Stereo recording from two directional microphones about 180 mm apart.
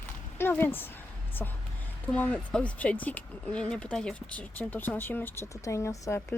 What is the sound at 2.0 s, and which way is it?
Speech, 10° left (ahead or behind).